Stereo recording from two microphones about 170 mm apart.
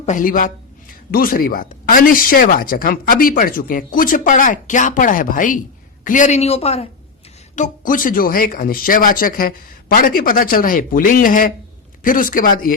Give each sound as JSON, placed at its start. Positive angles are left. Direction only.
{"t": 0.0, "sound": "speech", "side_deg": 50}
{"t": 7.5, "sound": "speech", "side_deg": 50}